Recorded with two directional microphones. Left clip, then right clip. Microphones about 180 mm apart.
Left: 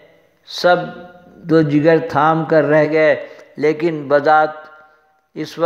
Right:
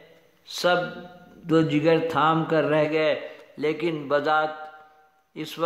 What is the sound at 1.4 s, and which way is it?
A man's voice, 10° left (ahead or behind).